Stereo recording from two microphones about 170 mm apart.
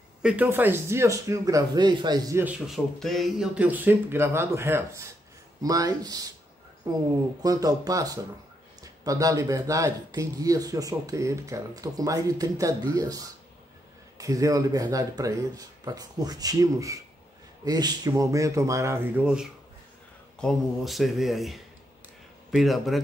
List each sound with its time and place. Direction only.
0.2 s speech: 5° right (ahead or behind); by 2.4 s 20° right (ahead or behind)
2.4 s speech: centre (ahead or behind); by 6.2 s 20° right (ahead or behind)
7.4 s speech: 20° right (ahead or behind); by 23.0 s centre (ahead or behind)